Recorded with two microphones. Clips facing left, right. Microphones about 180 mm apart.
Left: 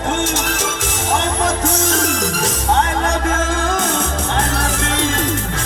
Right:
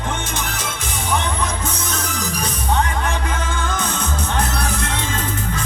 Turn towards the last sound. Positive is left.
turn(degrees=90)